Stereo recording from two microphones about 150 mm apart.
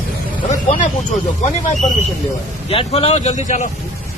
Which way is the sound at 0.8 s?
55° left (ahead or behind).